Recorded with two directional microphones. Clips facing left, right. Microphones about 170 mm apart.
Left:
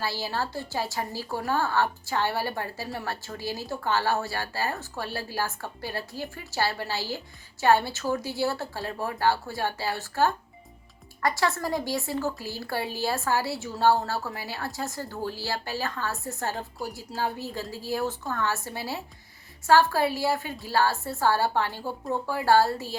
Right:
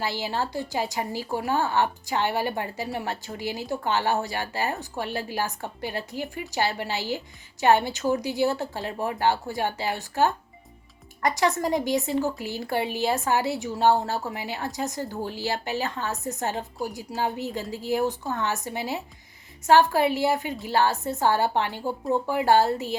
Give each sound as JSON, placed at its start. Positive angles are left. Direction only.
{"t": 0.0, "sound": "a woman's voice", "side_deg": -20}